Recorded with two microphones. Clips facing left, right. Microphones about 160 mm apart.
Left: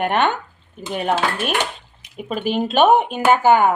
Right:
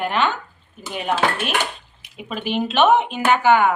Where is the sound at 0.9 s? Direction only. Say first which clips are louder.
Left 1 dB; 45° left (ahead or behind).